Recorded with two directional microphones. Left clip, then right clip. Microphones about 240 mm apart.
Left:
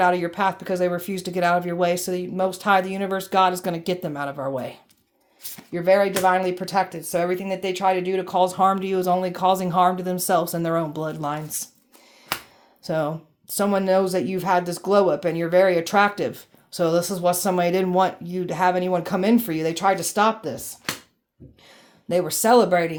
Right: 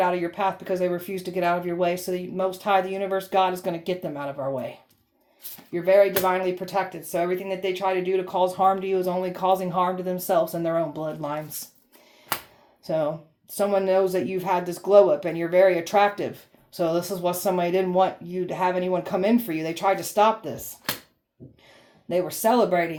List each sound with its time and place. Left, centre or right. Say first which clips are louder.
0.0 s speech: left 3 dB; left
12.8 s speech: even; left
22.1 s speech: left 4 dB; left